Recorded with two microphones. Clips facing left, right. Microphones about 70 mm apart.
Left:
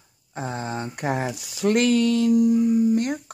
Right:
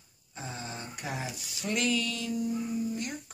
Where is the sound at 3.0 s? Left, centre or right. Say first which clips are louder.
Left 13 dB; left.